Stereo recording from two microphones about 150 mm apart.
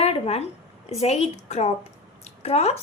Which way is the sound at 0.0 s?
45° left (ahead or behind).